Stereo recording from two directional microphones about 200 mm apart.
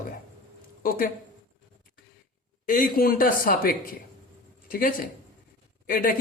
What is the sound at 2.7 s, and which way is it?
Speech, 45° left (ahead or behind).